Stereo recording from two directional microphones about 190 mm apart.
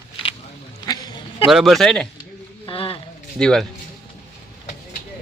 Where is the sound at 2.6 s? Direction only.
30° left (ahead or behind).